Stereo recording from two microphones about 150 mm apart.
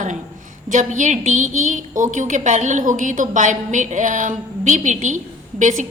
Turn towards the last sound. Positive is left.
turn(degrees=-55)  # may be behind; listen again after turning